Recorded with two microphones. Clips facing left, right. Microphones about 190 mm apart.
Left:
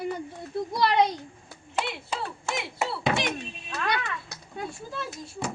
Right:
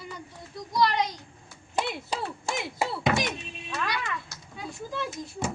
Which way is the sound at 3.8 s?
55° left (ahead or behind).